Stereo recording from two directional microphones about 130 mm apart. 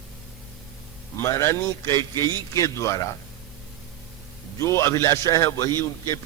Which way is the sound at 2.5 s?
25° left (ahead or behind).